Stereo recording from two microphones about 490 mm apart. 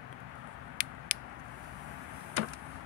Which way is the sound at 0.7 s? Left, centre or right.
Centre.